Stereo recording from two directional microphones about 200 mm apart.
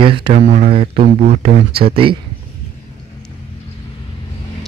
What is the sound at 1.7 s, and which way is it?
Speech, 50° right (ahead or behind).